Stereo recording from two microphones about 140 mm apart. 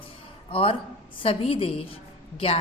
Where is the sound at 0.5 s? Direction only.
40° left (ahead or behind).